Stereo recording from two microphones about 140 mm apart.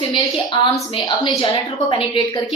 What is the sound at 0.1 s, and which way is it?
A woman's voice, 35° left (ahead or behind).